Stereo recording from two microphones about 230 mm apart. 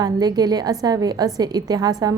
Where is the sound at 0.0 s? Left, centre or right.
Centre.